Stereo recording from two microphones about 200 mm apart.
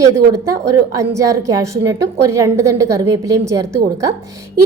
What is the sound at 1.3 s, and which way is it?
A woman's voice, 15° right (ahead or behind).